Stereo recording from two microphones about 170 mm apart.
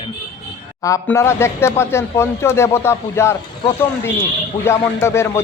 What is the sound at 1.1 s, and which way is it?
Speech, 15° left (ahead or behind).